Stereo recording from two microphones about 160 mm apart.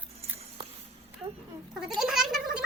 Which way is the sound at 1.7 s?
5° right (ahead or behind).